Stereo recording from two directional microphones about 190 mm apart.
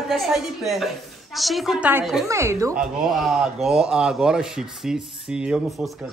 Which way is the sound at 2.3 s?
15° right (ahead or behind).